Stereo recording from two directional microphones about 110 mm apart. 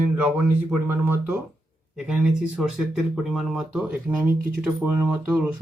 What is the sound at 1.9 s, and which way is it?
Speech, 5° right (ahead or behind).